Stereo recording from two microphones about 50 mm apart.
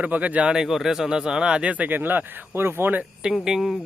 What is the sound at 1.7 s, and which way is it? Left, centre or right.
Speech, right.